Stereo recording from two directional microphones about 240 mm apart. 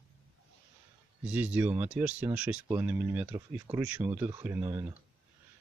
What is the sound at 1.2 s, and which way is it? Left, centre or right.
Speech, centre.